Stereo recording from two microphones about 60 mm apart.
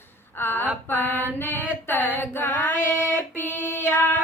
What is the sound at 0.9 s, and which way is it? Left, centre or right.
Mantra, left.